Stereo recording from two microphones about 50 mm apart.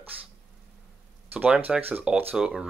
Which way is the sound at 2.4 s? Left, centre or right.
Centre.